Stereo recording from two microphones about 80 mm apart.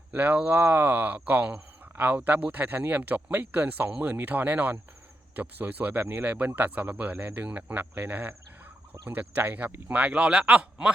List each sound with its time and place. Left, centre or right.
0.1 s speech: right